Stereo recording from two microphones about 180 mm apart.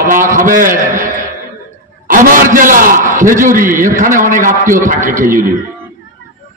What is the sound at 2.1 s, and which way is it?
A man's voice, 50° right (ahead or behind).